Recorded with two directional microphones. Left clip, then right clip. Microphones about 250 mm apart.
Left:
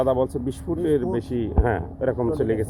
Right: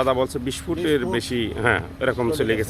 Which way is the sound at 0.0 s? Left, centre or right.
Centre.